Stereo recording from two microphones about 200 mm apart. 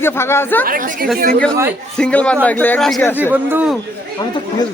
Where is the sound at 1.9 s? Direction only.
5° left (ahead or behind).